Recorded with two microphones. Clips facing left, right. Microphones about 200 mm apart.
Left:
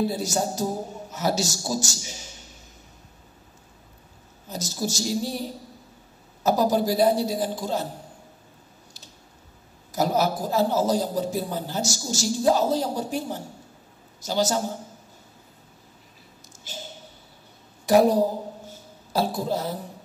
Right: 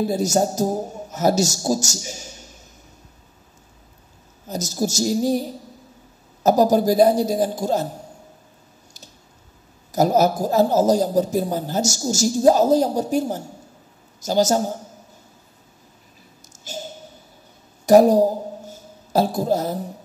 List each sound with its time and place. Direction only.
0.1 s a man's voice: 45° right (ahead or behind)
4.5 s a man's voice: 45° right (ahead or behind)
9.9 s a man's voice: 45° right (ahead or behind)
17.8 s a man's voice: 45° right (ahead or behind)
18.7 s a sound: 45° right (ahead or behind)